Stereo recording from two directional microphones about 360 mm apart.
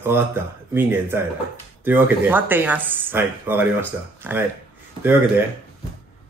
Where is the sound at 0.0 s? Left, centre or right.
Centre.